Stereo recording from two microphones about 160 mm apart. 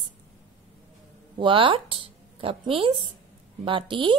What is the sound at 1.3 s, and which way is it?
A woman's voice, 30° right (ahead or behind).